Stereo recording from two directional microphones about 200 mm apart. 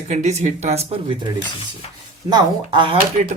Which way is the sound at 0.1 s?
35° right (ahead or behind).